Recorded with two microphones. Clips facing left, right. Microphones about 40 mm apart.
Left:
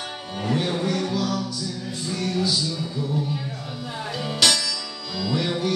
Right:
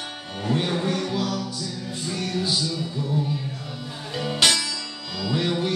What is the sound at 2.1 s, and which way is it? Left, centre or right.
Music, right.